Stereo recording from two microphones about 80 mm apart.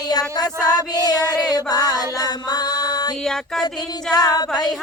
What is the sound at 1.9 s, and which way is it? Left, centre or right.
Music, left.